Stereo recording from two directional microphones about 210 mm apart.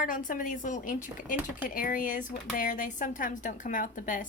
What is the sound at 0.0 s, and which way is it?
Speech, 40° left (ahead or behind).